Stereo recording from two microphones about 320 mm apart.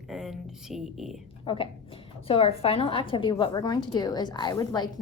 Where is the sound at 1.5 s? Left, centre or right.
Centre.